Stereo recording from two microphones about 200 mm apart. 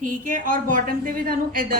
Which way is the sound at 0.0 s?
40° right (ahead or behind).